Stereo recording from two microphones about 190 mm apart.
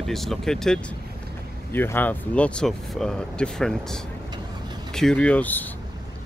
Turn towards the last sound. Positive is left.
turn(degrees=10)  # may be behind; listen again after turning